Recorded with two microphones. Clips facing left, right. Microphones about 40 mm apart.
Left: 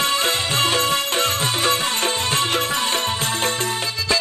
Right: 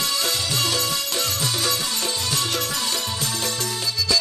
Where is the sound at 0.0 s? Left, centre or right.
Left.